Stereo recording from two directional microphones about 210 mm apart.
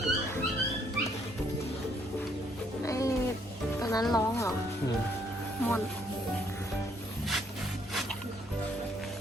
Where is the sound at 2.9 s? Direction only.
15° left (ahead or behind).